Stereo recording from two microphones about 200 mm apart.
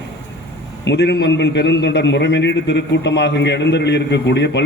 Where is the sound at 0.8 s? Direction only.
55° left (ahead or behind).